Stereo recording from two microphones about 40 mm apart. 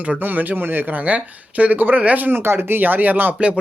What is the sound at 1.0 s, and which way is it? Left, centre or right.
Speech, right.